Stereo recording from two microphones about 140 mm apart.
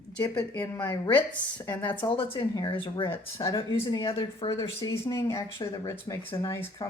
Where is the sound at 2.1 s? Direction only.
40° left (ahead or behind).